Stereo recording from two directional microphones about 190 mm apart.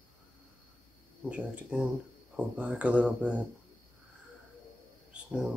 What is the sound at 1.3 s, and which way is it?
Speech, 5° right (ahead or behind).